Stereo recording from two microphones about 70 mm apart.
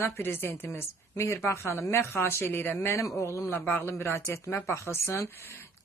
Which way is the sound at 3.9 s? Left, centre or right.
Left.